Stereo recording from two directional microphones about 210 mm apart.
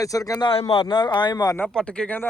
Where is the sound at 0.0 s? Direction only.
15° left (ahead or behind).